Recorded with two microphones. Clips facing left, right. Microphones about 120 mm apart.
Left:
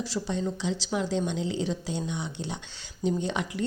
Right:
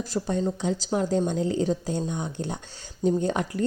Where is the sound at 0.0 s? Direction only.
45° right (ahead or behind).